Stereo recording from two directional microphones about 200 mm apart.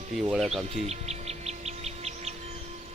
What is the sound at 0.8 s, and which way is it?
Bird, 30° right (ahead or behind).